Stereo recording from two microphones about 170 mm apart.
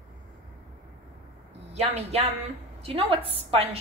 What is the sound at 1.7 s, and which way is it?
A woman's voice, 40° right (ahead or behind).